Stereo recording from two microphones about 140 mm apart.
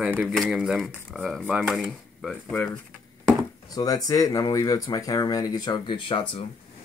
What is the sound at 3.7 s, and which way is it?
Speech, 25° left (ahead or behind).